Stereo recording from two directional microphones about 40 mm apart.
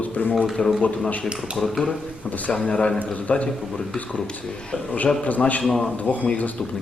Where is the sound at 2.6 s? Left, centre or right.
Left.